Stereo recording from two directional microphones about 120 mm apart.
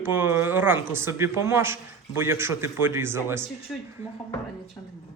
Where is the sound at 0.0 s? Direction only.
20° right (ahead or behind).